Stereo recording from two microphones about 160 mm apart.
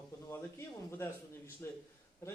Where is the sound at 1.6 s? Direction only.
15° left (ahead or behind).